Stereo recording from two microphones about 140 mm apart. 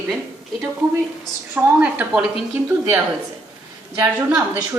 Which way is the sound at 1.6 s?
10° right (ahead or behind).